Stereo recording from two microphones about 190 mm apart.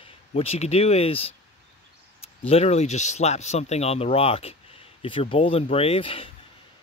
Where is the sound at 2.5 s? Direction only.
35° left (ahead or behind).